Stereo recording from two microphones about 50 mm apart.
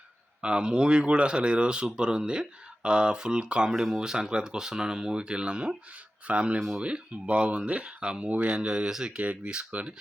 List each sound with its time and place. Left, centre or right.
0.4 s speech: right
3.8 s speech: centre; by 9.9 s right